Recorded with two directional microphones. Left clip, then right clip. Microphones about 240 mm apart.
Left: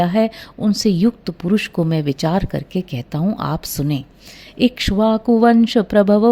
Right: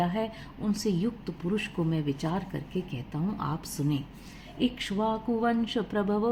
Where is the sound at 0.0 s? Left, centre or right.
Left.